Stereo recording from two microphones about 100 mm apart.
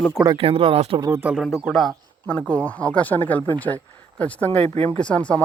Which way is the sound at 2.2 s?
10° left (ahead or behind).